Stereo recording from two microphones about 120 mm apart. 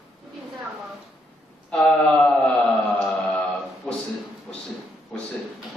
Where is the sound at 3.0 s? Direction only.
5° left (ahead or behind).